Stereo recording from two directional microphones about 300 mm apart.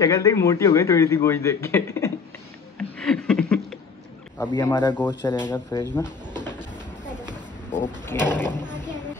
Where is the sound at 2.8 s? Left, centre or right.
Centre.